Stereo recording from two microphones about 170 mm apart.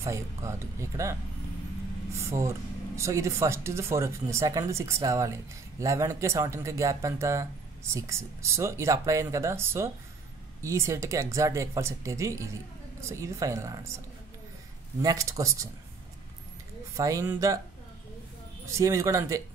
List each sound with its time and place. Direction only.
0.0 s speech: 15° right (ahead or behind)
2.1 s a man's voice: 15° right (ahead or behind)
16.9 s a man's voice: 20° right (ahead or behind)
18.7 s a man's voice: 20° right (ahead or behind)